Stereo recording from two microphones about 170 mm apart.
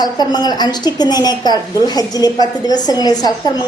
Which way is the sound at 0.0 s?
25° left (ahead or behind).